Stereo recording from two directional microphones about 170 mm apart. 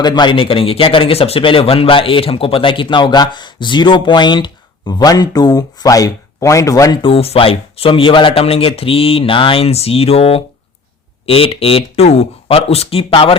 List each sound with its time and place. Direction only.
0.0 s speech: 25° left (ahead or behind)